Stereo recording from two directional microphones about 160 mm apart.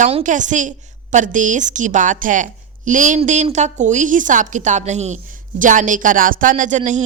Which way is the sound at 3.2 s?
40° right (ahead or behind).